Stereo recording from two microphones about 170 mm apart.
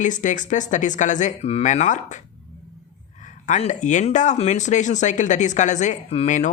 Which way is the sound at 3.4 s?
45° left (ahead or behind).